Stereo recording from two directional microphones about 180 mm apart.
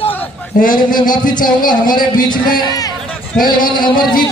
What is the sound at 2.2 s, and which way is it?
A man's voice, 25° left (ahead or behind).